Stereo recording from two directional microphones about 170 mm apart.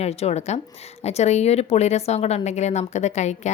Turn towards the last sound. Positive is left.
turn(degrees=40)  # may be behind; listen again after turning